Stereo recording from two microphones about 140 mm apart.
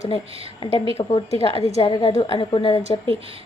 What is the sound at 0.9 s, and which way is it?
A woman's voice, 45° left (ahead or behind).